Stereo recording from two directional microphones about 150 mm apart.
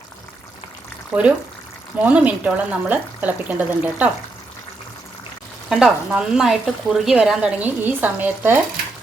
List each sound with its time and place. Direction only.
1.1 s speech: 5° right (ahead or behind)
5.6 s speech: 5° right (ahead or behind)